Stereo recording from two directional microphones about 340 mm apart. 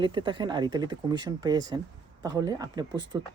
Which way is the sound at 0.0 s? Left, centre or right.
Centre.